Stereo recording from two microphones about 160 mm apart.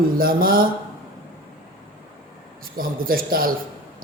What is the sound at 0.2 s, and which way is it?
Speech, 65° right (ahead or behind).